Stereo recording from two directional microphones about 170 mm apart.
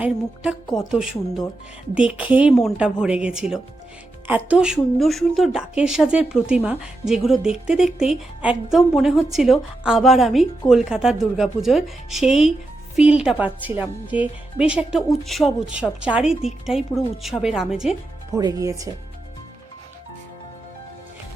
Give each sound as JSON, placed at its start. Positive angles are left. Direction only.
{"t": 0.8, "sound": "a woman's voice", "side_deg": -5}
{"t": 18.3, "sound": "speech", "side_deg": -20}